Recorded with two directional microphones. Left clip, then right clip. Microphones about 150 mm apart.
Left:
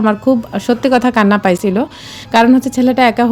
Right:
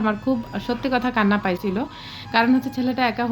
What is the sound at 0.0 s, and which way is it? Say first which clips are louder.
A woman's voice: left 10 dB; 55° left (ahead or behind).